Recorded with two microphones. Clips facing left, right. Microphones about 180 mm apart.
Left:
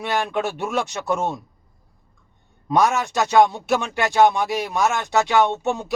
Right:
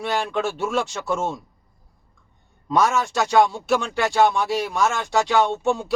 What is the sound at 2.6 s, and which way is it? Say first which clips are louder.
Speech: left 1 dB; 15° left (ahead or behind).